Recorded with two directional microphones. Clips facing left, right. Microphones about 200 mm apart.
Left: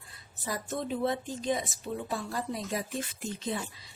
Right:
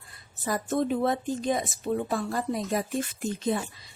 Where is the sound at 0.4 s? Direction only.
50° right (ahead or behind).